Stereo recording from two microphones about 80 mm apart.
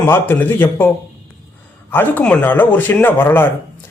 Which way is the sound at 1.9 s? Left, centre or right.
Left.